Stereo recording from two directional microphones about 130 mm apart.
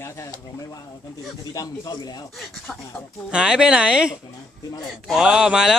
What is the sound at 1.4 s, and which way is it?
Speech, 30° left (ahead or behind).